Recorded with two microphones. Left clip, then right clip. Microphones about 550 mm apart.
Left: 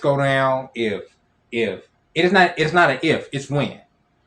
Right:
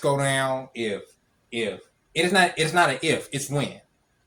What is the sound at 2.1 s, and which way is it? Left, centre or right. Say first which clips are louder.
Speech: left 5 dB; right.